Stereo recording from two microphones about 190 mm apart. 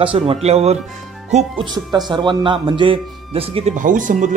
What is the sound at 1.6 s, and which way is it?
A man's voice, 20° right (ahead or behind).